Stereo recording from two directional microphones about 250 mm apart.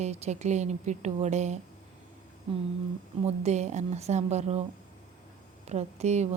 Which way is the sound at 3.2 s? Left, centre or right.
Right.